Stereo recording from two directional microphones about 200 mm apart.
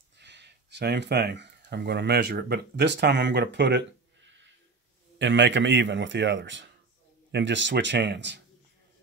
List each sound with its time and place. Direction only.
0.2 s speech: 60° right (ahead or behind)
5.2 s a man's voice: 65° right (ahead or behind)